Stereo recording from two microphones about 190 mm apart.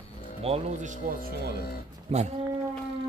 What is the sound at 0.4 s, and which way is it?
Speech, 35° right (ahead or behind).